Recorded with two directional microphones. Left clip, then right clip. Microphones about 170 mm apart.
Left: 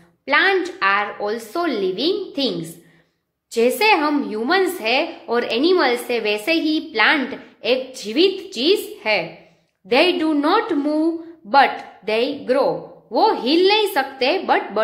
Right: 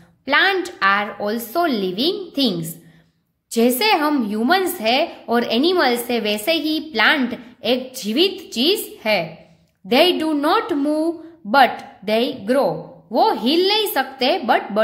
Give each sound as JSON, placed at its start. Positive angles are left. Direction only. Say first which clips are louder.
{"t": 0.2, "sound": "a woman's voice", "louder": "even", "side_deg": -35}